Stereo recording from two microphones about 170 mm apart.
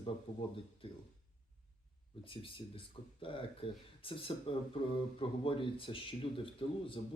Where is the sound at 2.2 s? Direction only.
30° left (ahead or behind).